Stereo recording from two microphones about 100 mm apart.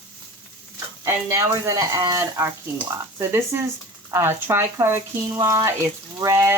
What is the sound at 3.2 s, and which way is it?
Speech, 25° right (ahead or behind).